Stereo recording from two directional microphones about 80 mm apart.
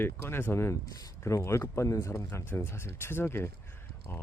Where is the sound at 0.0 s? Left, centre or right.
Left.